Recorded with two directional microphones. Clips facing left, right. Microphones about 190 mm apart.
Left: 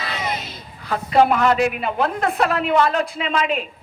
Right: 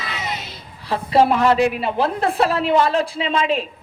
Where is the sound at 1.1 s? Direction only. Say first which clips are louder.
Right 1 dB; 30° right (ahead or behind).